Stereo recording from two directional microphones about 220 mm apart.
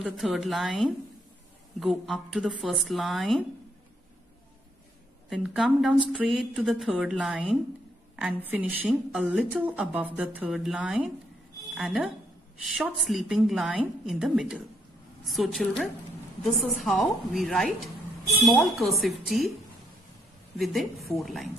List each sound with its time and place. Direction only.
0.0 s speech: centre (ahead or behind)
5.3 s a woman's voice: centre (ahead or behind)
20.5 s speech: centre (ahead or behind)